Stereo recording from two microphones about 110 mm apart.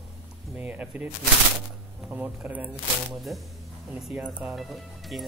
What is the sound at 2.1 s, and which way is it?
Music, 15° right (ahead or behind).